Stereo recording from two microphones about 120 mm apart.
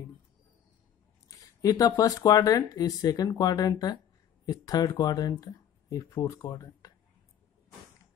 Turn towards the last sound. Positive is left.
turn(degrees=30)  # may be behind; listen again after turning